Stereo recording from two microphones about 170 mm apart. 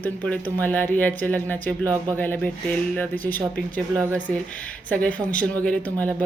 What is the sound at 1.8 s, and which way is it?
Speech, 20° right (ahead or behind).